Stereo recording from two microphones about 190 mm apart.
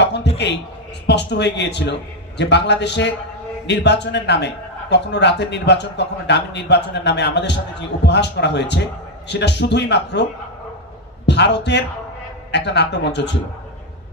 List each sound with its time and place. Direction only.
0.0 s a sound: 65° left (ahead or behind)
1.0 s a man's voice: 65° left (ahead or behind)
11.2 s a man's voice: 65° left (ahead or behind)